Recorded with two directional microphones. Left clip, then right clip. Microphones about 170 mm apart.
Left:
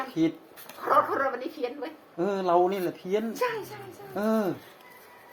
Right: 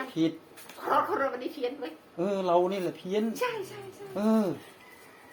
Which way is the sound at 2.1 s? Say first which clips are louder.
Left 2 dB; 10° right (ahead or behind).